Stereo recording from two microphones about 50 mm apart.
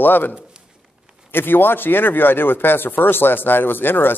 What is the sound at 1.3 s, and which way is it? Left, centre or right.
Speech, left.